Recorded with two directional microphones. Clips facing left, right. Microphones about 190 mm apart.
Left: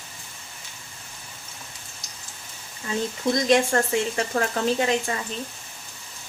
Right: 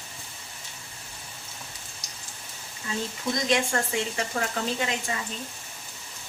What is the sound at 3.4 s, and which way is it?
Speech, 40° left (ahead or behind).